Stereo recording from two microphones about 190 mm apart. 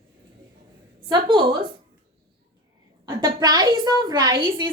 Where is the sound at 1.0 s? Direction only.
25° right (ahead or behind).